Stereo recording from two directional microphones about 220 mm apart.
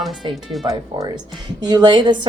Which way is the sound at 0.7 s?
15° right (ahead or behind).